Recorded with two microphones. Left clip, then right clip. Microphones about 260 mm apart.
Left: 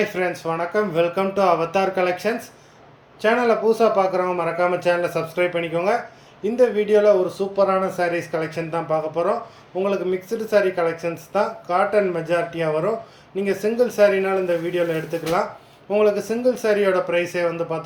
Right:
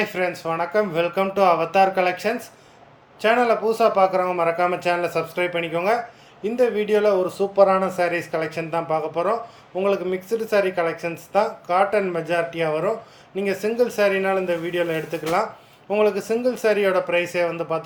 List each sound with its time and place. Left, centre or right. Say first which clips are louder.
0.0 s speech: left 1 dB; centre